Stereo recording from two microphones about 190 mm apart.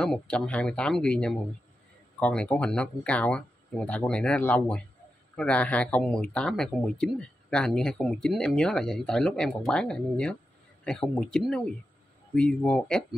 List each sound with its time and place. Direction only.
0.0 s speech: 5° left (ahead or behind)